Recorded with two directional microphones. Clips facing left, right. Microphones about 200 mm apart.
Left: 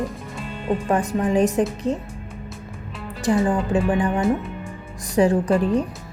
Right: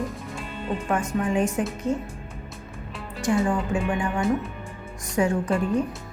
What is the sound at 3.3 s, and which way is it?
Speech, 30° left (ahead or behind).